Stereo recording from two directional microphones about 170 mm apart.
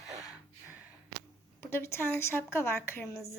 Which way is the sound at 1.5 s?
15° left (ahead or behind).